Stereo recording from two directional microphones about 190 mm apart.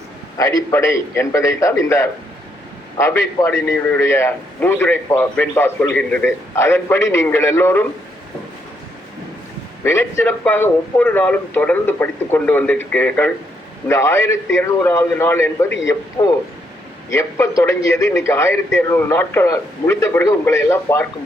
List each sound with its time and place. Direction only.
0.3 s a man's voice: 15° left (ahead or behind)
9.8 s a man's voice: 15° left (ahead or behind)